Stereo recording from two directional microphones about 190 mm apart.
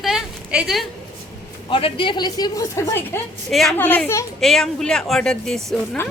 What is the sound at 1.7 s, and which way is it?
A woman's voice, 25° left (ahead or behind).